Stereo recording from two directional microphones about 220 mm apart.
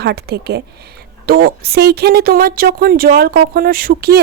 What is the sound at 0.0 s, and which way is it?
A woman's voice, 45° right (ahead or behind).